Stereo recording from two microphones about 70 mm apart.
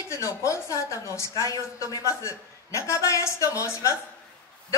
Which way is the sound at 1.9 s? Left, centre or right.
Left.